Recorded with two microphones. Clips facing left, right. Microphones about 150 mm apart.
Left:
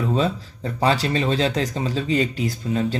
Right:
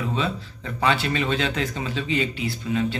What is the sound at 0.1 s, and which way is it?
Speech, 40° left (ahead or behind).